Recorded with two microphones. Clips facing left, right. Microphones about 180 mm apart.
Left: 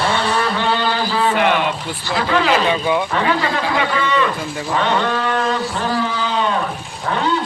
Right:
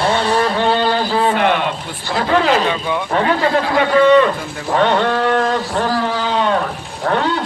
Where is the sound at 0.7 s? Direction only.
50° right (ahead or behind).